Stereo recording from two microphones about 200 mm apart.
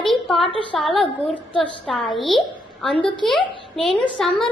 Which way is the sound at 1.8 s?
Centre (ahead or behind).